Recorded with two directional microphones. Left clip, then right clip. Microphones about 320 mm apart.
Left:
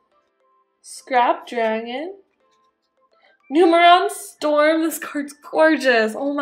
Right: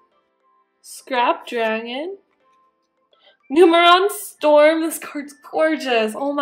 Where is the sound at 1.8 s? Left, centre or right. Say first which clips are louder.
Even; right.